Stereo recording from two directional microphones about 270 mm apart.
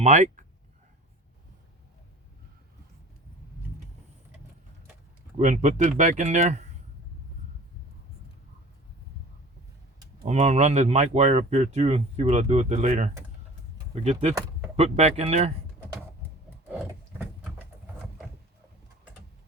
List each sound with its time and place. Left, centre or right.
0.0 s speech: right
5.4 s speech: right
10.2 s speech: right
16.6 s a sound: centre